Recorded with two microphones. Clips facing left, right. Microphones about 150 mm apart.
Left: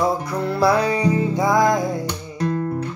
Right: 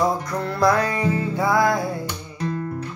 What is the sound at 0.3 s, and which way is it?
Music, 10° left (ahead or behind).